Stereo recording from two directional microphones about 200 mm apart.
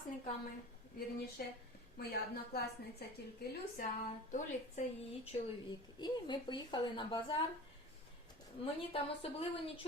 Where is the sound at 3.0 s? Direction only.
55° left (ahead or behind).